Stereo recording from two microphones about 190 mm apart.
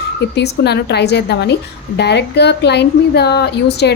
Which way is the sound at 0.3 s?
60° left (ahead or behind).